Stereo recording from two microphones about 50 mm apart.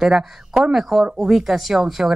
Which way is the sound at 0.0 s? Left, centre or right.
Centre.